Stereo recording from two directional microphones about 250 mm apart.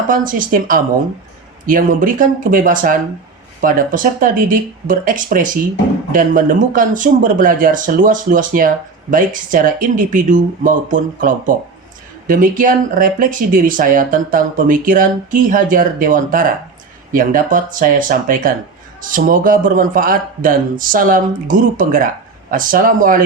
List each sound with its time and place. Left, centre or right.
0.1 s speech: right